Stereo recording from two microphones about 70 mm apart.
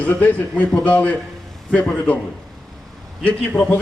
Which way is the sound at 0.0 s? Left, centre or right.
Left.